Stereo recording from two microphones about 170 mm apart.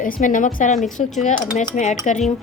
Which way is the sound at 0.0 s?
50° left (ahead or behind).